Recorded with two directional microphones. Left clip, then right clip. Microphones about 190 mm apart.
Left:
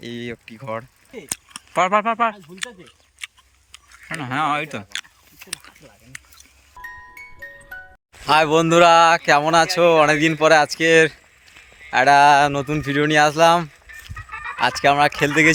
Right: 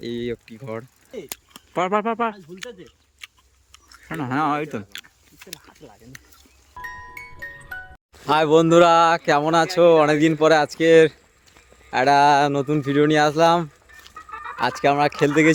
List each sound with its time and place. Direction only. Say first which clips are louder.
0.0 s speech: right 3 dB; 10° right (ahead or behind)
2.8 s a sound: left 6 dB; 15° right (ahead or behind)
6.7 s speech: right 2 dB; centre (ahead or behind)
14.2 s fowl: left 2 dB; 35° right (ahead or behind)
14.6 s speech: left 3 dB; centre (ahead or behind)